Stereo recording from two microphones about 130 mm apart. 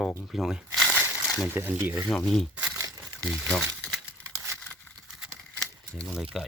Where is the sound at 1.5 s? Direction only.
15° right (ahead or behind).